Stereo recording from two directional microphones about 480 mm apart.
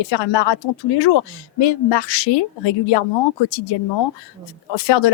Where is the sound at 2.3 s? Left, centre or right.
Left.